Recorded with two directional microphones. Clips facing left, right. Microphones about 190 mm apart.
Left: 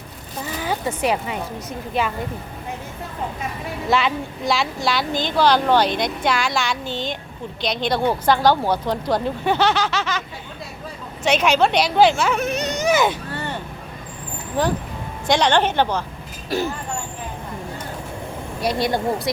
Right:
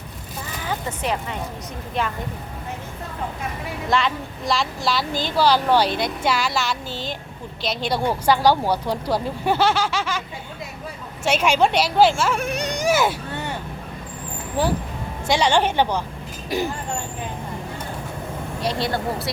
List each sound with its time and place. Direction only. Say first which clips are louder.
0.7 s a woman's voice: left 4 dB; 10° left (ahead or behind)
3.8 s a woman's voice: left 2 dB; 5° left (ahead or behind)
12.4 s speech: left 2 dB; 10° right (ahead or behind)
15.3 s a woman's voice: left 1 dB; 10° right (ahead or behind)
18.6 s speech: left 3 dB; 15° left (ahead or behind)